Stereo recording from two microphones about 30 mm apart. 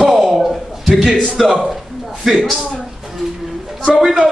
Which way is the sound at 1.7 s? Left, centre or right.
Centre.